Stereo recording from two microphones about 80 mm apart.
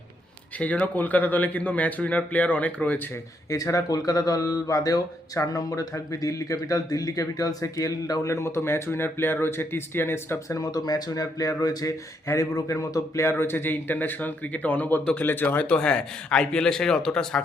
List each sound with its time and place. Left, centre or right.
0.6 s speech: centre
3.5 s speech: left
10.5 s a man's voice: left; by 17.4 s centre